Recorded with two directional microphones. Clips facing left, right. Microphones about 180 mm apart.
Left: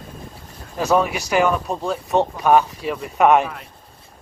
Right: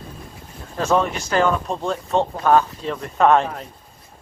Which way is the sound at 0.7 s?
10° left (ahead or behind).